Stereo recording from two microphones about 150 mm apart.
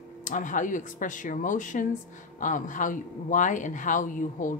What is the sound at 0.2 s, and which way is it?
Speech, 60° left (ahead or behind).